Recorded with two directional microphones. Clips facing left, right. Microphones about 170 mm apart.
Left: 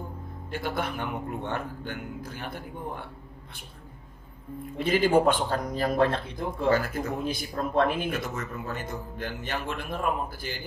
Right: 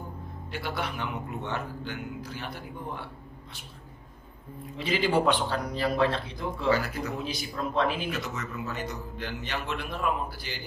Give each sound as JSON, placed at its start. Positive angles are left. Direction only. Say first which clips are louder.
{"t": 0.5, "sound": "speech", "louder": "left 3 dB", "side_deg": 50}
{"t": 4.7, "sound": "speech", "louder": "left 4 dB", "side_deg": 50}